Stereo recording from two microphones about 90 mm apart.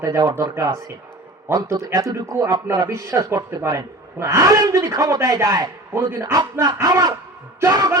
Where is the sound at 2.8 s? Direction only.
30° right (ahead or behind).